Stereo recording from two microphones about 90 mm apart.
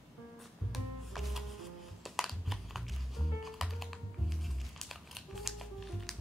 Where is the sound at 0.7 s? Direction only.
Centre (ahead or behind).